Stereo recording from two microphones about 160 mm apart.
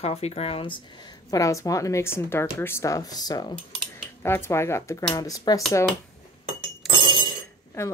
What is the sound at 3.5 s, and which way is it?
Speech, 10° left (ahead or behind).